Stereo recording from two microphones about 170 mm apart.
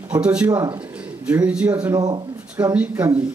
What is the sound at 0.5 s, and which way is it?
Speech, 20° right (ahead or behind).